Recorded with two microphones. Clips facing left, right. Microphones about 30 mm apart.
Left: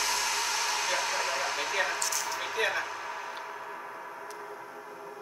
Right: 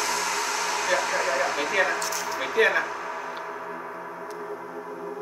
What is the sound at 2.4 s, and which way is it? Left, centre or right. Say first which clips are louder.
Speech: right 10 dB; right.